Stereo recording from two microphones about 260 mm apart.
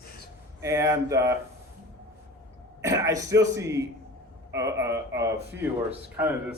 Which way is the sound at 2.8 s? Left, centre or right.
Centre.